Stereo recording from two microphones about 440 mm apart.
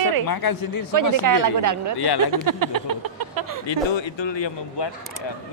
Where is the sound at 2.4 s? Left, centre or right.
Right.